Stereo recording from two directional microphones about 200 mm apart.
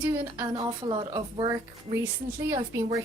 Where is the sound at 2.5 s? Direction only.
25° right (ahead or behind).